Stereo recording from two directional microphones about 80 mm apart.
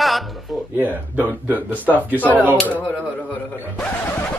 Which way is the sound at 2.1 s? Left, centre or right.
Left.